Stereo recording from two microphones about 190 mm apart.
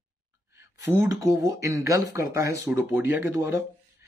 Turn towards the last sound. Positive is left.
turn(degrees=-15)  # may be behind; listen again after turning